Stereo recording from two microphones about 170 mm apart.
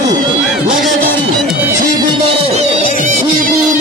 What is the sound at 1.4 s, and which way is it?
Music, 10° right (ahead or behind).